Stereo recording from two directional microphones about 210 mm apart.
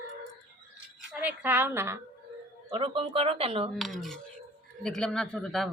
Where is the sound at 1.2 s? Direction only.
10° right (ahead or behind).